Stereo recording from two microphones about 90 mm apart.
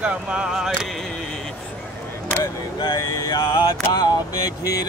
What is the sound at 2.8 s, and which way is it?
Speech, 45° left (ahead or behind).